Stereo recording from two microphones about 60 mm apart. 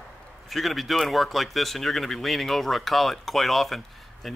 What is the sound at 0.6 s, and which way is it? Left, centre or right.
Speech, centre.